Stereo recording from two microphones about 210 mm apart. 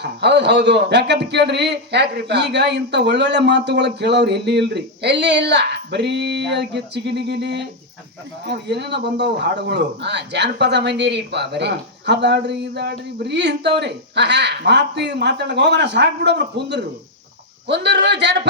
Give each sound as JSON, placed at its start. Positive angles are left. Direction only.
{"t": 0.0, "sound": "speech", "side_deg": -55}